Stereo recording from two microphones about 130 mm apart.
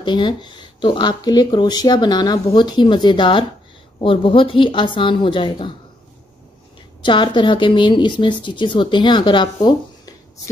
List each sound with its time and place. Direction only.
0.0 s a woman's voice: 35° left (ahead or behind)
7.0 s a woman's voice: 40° left (ahead or behind)